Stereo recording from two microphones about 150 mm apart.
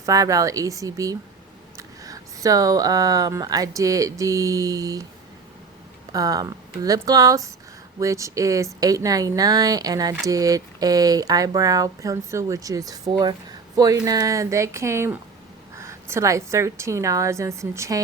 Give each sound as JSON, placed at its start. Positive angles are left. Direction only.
{"t": 0.0, "sound": "speech", "side_deg": -20}
{"t": 6.1, "sound": "speech", "side_deg": -25}